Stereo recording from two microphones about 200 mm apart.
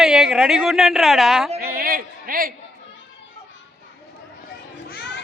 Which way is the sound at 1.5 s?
50° right (ahead or behind).